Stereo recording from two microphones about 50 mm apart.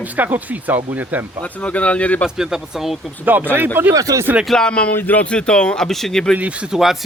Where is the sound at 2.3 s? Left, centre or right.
Centre.